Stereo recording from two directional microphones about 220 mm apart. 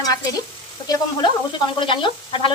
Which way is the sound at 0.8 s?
20° left (ahead or behind).